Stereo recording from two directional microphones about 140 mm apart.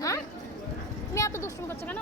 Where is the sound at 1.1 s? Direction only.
20° left (ahead or behind).